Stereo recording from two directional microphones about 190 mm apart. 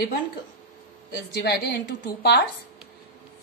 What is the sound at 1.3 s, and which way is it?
Speech, 55° left (ahead or behind).